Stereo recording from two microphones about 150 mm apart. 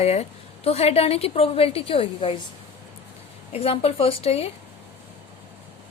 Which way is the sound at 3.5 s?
40° left (ahead or behind).